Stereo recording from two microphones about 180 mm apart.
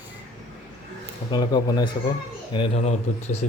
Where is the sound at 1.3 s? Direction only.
25° left (ahead or behind).